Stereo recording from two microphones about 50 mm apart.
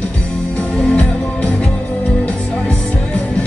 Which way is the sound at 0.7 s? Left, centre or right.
Centre.